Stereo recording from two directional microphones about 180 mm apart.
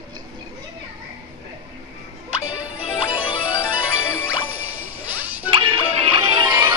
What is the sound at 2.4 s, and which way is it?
Music, 5° right (ahead or behind).